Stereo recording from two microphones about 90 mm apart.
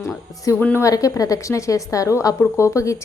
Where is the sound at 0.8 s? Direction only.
40° left (ahead or behind).